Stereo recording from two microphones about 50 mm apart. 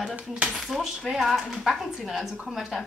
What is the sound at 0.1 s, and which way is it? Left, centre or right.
Speech, right.